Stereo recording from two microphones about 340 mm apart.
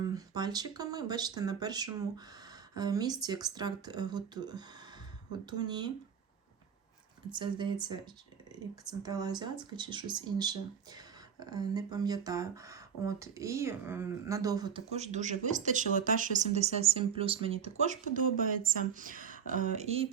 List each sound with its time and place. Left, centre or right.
0.0 s speech: centre
7.3 s a woman's voice: centre